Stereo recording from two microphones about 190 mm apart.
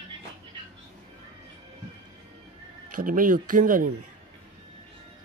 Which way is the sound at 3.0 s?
45° right (ahead or behind).